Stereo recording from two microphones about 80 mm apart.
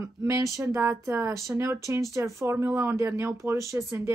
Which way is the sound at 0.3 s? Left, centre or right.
Right.